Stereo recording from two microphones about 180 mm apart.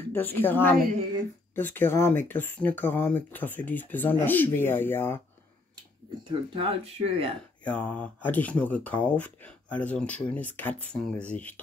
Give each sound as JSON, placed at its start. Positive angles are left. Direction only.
{"t": 0.1, "sound": "speech", "side_deg": 10}
{"t": 6.5, "sound": "speech", "side_deg": -30}
{"t": 7.6, "sound": "speech", "side_deg": 5}